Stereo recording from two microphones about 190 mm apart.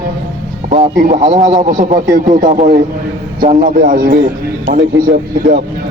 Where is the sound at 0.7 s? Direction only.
40° right (ahead or behind).